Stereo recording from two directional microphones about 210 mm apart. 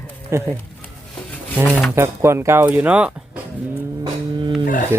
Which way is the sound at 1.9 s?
10° right (ahead or behind).